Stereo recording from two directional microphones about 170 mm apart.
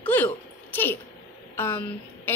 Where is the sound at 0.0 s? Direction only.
10° left (ahead or behind).